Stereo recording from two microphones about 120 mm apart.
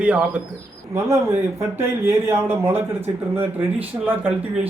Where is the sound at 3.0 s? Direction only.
55° right (ahead or behind).